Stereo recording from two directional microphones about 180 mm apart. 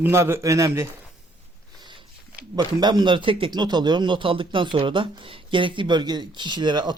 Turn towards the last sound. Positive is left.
turn(degrees=-25)  # may be behind; listen again after turning